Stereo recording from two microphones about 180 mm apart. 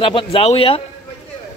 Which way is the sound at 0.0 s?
30° left (ahead or behind).